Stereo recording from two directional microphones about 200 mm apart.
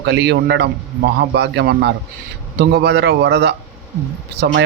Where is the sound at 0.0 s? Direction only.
60° right (ahead or behind).